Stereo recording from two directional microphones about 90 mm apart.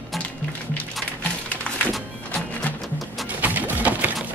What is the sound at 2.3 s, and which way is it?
Music, 15° left (ahead or behind).